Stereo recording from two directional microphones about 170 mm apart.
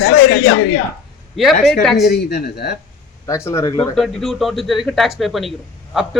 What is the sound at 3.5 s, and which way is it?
Speech, 20° left (ahead or behind).